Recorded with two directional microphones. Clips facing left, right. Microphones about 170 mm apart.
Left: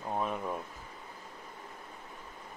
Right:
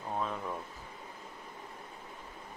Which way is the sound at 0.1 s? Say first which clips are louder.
Left 2 dB; 15° left (ahead or behind).